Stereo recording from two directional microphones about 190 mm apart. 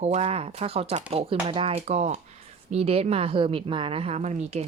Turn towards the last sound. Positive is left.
turn(degrees=-35)  # may be behind; listen again after turning